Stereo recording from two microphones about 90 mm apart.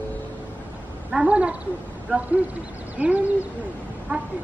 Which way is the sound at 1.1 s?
15° right (ahead or behind).